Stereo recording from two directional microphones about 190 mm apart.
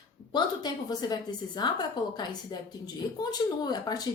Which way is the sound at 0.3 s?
20° left (ahead or behind).